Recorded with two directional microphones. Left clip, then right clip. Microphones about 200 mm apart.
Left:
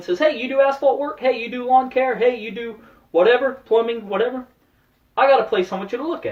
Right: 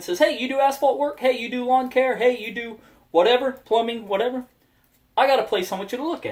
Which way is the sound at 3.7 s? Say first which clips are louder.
Left 2 dB; 45° right (ahead or behind).